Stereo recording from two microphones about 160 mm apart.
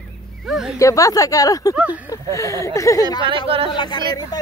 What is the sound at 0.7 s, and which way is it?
Speech, 20° left (ahead or behind).